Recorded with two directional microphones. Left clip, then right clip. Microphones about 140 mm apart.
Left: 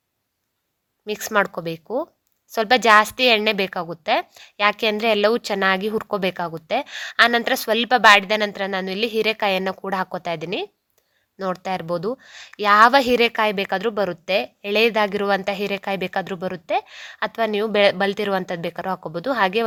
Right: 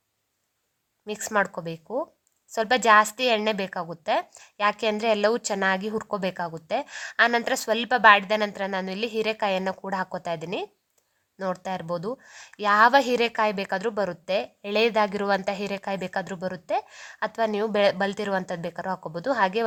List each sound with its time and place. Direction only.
1.0 s speech: 30° left (ahead or behind)